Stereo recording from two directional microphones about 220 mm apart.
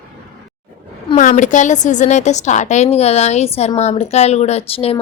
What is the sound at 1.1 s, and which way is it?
A woman's voice, 35° left (ahead or behind).